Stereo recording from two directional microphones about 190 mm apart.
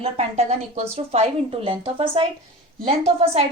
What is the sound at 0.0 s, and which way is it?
A woman's voice, 35° right (ahead or behind).